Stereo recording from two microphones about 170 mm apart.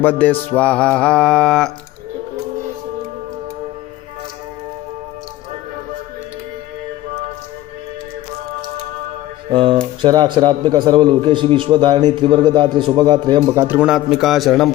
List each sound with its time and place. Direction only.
0.0 s music: 10° left (ahead or behind)
9.5 s a man's voice: 30° right (ahead or behind)
13.6 s music: 10° right (ahead or behind)